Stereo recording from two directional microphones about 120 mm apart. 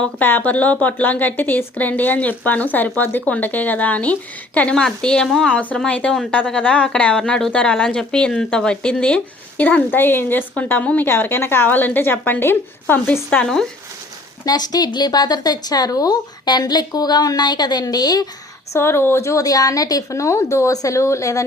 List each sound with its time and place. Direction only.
0.0 s speech: 15° left (ahead or behind)
14.4 s speech: 35° left (ahead or behind)
18.7 s a woman's voice: 20° left (ahead or behind)